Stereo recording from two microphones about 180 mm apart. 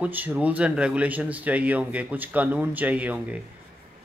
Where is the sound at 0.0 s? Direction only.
10° right (ahead or behind).